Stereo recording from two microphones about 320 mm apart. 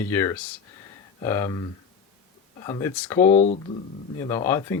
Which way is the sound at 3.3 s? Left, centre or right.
Left.